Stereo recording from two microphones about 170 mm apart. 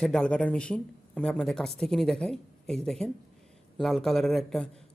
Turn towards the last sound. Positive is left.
turn(degrees=0)  # may be behind; listen again after turning